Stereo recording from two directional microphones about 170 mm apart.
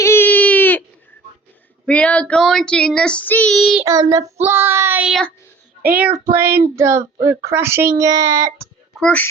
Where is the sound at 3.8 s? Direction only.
20° right (ahead or behind).